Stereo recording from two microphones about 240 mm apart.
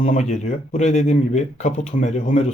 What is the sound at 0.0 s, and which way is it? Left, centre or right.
Speech, left.